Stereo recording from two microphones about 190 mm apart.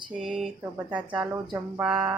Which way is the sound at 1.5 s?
5° right (ahead or behind).